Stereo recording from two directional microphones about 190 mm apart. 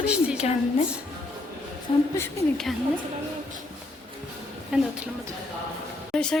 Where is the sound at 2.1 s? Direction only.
15° left (ahead or behind).